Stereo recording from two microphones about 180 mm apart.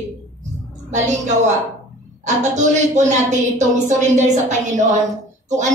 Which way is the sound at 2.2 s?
40° right (ahead or behind).